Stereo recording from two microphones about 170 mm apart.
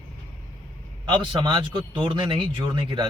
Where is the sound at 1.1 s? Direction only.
30° right (ahead or behind).